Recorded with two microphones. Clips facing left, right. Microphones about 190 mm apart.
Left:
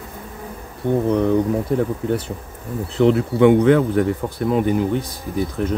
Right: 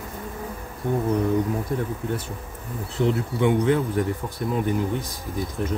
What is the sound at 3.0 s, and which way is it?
Speech, 80° left.